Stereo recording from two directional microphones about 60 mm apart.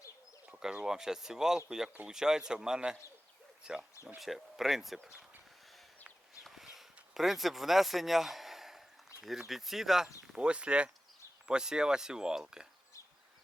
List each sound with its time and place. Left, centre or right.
0.4 s speech: centre
4.2 s speech: centre
6.4 s a sound: centre
9.5 s speech: centre
10.3 s speech: centre